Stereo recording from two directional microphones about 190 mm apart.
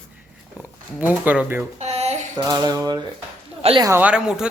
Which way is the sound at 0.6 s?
10° right (ahead or behind).